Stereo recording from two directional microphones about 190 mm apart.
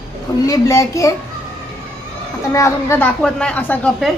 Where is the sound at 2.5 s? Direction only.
15° left (ahead or behind).